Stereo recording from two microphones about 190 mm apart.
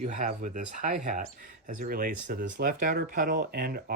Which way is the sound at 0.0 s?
40° right (ahead or behind).